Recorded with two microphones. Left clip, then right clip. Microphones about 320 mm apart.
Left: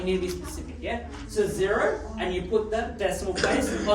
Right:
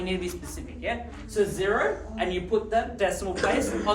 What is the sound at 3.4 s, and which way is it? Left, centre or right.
Speech, centre.